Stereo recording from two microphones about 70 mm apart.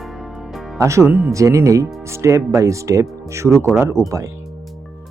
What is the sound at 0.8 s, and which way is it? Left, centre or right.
Speech, right.